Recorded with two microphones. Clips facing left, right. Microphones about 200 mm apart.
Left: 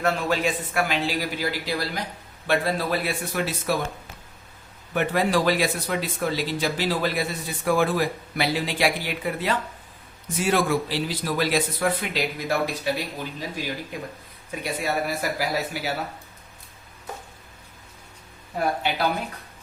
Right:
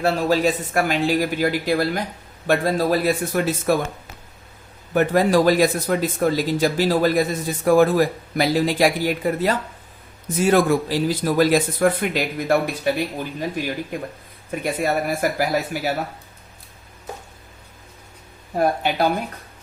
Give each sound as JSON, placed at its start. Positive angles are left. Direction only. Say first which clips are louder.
{"t": 0.0, "sound": "speech", "louder": "right 5 dB", "side_deg": -35}
{"t": 4.9, "sound": "speech", "louder": "right 6 dB", "side_deg": -40}
{"t": 13.9, "sound": "speech", "louder": "right 5 dB", "side_deg": -50}
{"t": 18.5, "sound": "speech", "louder": "right 5 dB", "side_deg": -45}